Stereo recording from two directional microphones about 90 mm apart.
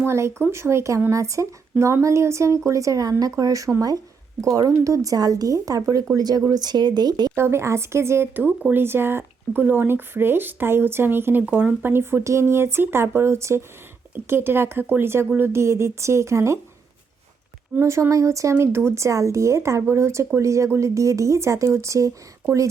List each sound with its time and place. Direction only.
0.0 s speech: 30° right (ahead or behind); by 7.3 s 50° right (ahead or behind)
7.3 s speech: 30° right (ahead or behind)
17.7 s speech: 30° right (ahead or behind)